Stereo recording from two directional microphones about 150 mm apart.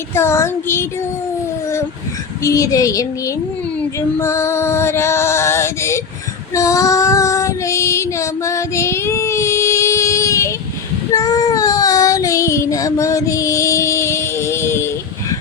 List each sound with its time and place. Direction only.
0.1 s music: 15° left (ahead or behind)
2.4 s a woman's voice: 20° left (ahead or behind)
4.2 s music: 20° left (ahead or behind)
6.5 s child singing: 20° left (ahead or behind)